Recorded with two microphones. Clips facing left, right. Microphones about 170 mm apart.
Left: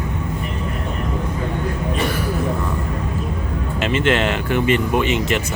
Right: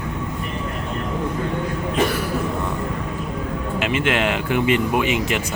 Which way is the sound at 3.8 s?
10° right (ahead or behind).